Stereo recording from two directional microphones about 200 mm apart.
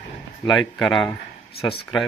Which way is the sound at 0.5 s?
Centre (ahead or behind).